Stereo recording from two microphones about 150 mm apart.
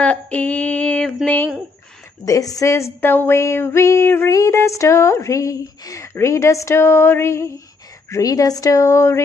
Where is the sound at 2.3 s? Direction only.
20° left (ahead or behind).